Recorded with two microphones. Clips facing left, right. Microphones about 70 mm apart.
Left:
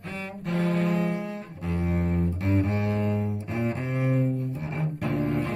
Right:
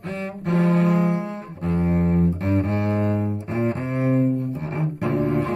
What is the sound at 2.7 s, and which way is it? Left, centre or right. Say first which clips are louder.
Cello: right 4 dB; right.